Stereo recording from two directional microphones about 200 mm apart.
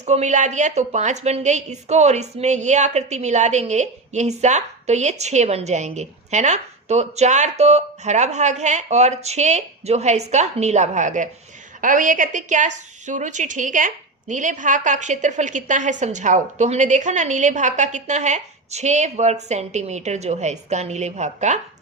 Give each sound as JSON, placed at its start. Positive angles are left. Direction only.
{"t": 0.0, "sound": "a woman's voice", "side_deg": -35}